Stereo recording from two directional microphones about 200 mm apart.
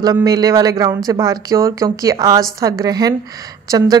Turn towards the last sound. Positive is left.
turn(degrees=-20)  # may be behind; listen again after turning